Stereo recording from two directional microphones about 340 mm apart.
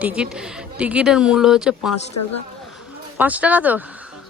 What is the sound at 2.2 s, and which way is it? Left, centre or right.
Speech, left.